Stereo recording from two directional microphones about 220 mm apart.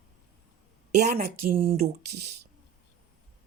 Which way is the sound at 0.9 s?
45° right (ahead or behind).